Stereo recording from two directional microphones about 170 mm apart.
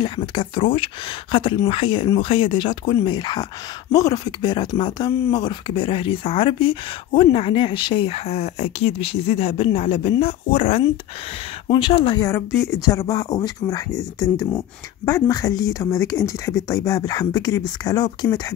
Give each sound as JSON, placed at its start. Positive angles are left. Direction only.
{"t": 0.0, "sound": "speech", "side_deg": 30}
{"t": 12.4, "sound": "speech", "side_deg": 0}
{"t": 12.8, "sound": "speech", "side_deg": 20}